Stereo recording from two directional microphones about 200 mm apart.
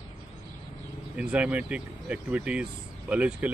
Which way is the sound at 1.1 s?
5° right (ahead or behind).